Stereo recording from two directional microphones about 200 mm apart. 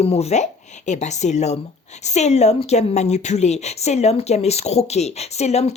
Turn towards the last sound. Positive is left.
turn(degrees=35)  # may be behind; listen again after turning